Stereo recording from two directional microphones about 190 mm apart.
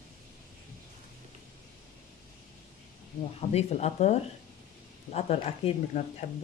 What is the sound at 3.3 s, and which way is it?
Speech, 35° left (ahead or behind).